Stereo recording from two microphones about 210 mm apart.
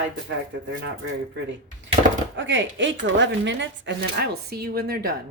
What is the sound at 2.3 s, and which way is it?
Speech, 60° right (ahead or behind).